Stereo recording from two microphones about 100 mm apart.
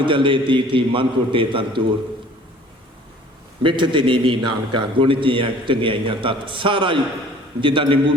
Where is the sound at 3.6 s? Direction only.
55° right (ahead or behind).